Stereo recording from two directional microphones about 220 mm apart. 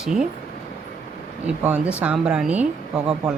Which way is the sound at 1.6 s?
5° right (ahead or behind).